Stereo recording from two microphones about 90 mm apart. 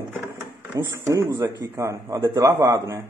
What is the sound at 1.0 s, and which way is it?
Speech, 30° right (ahead or behind).